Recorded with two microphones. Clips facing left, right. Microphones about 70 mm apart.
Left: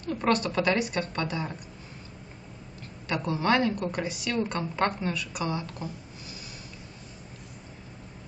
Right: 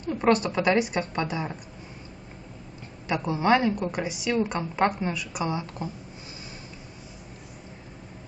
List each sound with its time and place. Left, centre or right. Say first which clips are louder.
0.0 s a woman's voice: right 3 dB; centre
3.1 s a woman's voice: right 3 dB; centre